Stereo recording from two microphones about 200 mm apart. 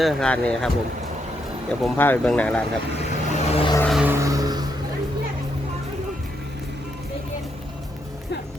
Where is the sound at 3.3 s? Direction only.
25° left (ahead or behind).